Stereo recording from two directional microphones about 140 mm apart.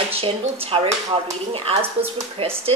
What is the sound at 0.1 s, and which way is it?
Speech, 45° right (ahead or behind).